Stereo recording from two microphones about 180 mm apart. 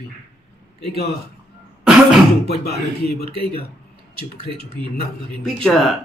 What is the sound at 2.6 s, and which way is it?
Speech, 60° left (ahead or behind).